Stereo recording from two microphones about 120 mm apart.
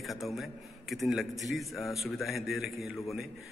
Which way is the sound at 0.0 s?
Centre (ahead or behind).